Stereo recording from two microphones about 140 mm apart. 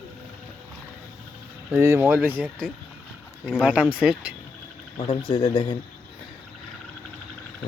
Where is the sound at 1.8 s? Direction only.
20° right (ahead or behind).